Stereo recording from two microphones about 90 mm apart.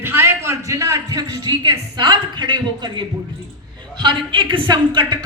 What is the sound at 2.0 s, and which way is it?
Speech, 60° right (ahead or behind).